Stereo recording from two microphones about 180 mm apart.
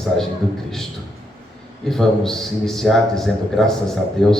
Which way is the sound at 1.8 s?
Centre (ahead or behind).